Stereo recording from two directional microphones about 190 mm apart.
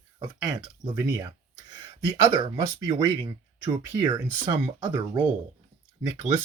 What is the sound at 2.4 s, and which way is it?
Speech, 15° right (ahead or behind).